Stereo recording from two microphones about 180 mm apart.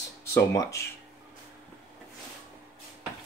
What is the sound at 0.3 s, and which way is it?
Speech, 15° left (ahead or behind).